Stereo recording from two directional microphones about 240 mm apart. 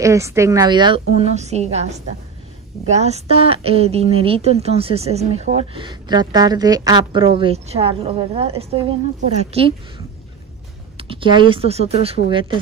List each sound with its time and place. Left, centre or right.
0.0 s a woman's voice: centre
11.0 s a woman's voice: right